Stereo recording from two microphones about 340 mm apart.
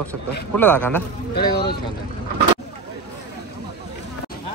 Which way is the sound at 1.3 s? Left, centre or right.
Left.